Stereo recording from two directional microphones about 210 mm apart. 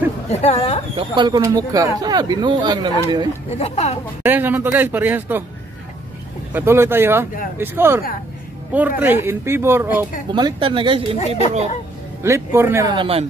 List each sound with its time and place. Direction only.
0.3 s speech: 30° left (ahead or behind)
0.9 s speech: 20° right (ahead or behind)
3.5 s speech: 30° left (ahead or behind)
4.2 s speech: 10° right (ahead or behind)
6.5 s speech: 10° right (ahead or behind)
10.3 s speech: 25° right (ahead or behind)
11.1 s speech: 30° left (ahead or behind)
12.2 s speech: 10° right (ahead or behind)
12.9 s speech: 25° right (ahead or behind)